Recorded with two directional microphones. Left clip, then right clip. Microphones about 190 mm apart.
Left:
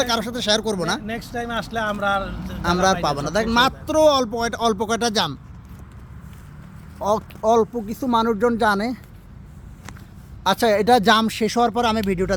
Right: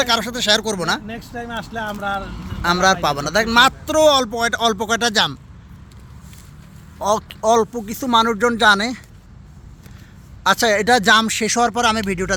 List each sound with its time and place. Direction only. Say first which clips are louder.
0.0 s a man's voice: right 4 dB; 5° left (ahead or behind)
1.0 s speech: left 2 dB; 20° left (ahead or behind)
2.6 s a man's voice: right 3 dB; 5° left (ahead or behind)
7.0 s a man's voice: right 2 dB; 5° left (ahead or behind)
10.4 s a man's voice: right 2 dB; 5° left (ahead or behind)